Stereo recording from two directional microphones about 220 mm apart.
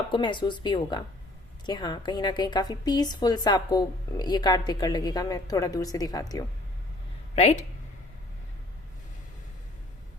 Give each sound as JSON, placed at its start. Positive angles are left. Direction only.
{"t": 0.1, "sound": "a woman's voice", "side_deg": 20}
{"t": 7.3, "sound": "a woman's voice", "side_deg": 30}